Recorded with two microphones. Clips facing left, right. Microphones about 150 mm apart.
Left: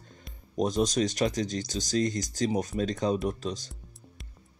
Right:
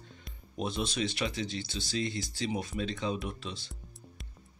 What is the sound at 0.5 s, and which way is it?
Speech, 40° left (ahead or behind).